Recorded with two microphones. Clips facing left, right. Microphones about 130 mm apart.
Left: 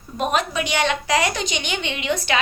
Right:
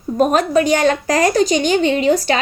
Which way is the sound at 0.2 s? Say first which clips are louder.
Right 8 dB; 40° right (ahead or behind).